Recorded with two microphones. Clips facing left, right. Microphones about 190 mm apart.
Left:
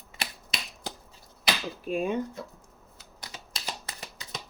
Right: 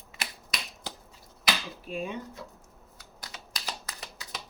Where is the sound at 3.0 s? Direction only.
25° left (ahead or behind).